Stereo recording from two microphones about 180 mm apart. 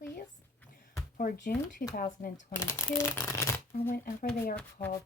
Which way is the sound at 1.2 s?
55° left (ahead or behind).